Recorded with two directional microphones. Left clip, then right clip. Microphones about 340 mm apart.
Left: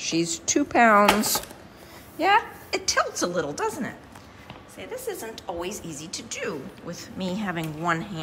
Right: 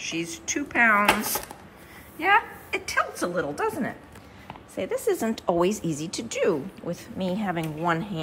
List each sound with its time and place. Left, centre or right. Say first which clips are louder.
0.0 s a woman's voice: left 5 dB; centre
4.7 s a woman's voice: right 8 dB; centre